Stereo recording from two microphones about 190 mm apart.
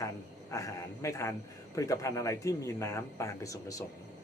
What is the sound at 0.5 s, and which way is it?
Speech, 15° left (ahead or behind).